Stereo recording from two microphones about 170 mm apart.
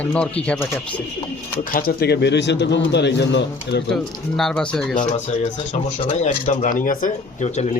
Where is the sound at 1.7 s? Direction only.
60° left (ahead or behind); by 3.8 s 85° left.